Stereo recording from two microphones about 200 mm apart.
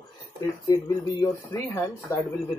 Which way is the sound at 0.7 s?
20° left (ahead or behind).